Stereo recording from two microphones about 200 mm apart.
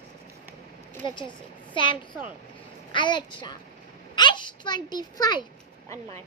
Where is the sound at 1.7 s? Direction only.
25° left (ahead or behind).